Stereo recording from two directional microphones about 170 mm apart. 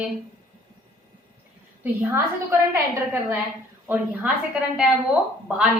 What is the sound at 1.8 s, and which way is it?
A woman's voice, 15° right (ahead or behind).